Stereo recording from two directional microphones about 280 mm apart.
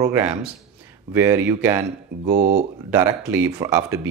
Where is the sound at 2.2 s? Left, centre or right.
Right.